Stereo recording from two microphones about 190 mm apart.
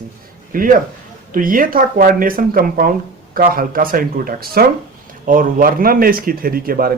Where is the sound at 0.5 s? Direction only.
45° right (ahead or behind).